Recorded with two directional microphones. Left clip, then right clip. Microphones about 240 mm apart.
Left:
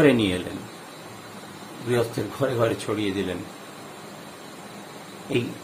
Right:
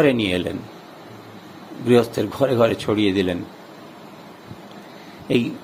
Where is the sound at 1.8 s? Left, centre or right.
Right.